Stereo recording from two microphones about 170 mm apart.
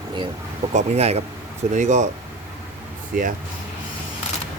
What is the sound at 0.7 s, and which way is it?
Speech, 40° right (ahead or behind).